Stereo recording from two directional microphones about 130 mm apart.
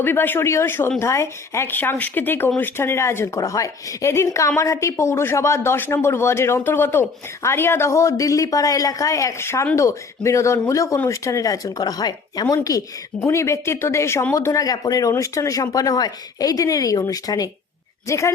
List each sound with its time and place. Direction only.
0.0 s speech: 15° left (ahead or behind)